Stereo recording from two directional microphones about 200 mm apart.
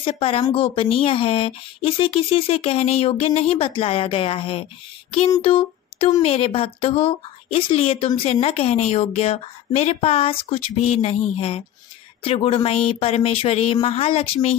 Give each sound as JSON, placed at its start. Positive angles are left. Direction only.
{"t": 0.0, "sound": "a woman's voice", "side_deg": 30}
{"t": 5.3, "sound": "a sound", "side_deg": 25}
{"t": 6.2, "sound": "a woman's voice", "side_deg": 30}